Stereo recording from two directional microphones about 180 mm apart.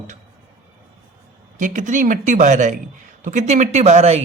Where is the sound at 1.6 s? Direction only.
45° right (ahead or behind).